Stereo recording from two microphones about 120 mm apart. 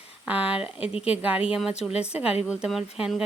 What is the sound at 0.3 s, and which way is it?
Speech, 10° right (ahead or behind).